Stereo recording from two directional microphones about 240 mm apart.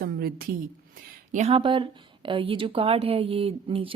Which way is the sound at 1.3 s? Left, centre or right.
Right.